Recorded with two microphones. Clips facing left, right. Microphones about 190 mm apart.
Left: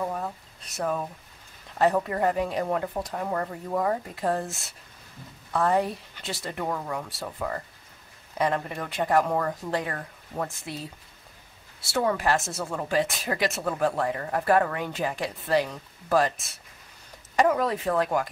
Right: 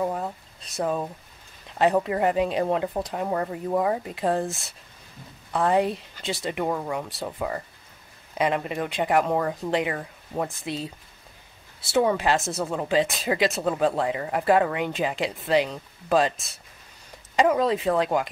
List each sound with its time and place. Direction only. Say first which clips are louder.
0.0 s a sound: right 3 dB; 20° right (ahead or behind)
0.7 s speech: right 2 dB; 20° right (ahead or behind)
5.5 s speech: right 2 dB; 20° right (ahead or behind)
17.4 s speech: right 2 dB; 20° right (ahead or behind)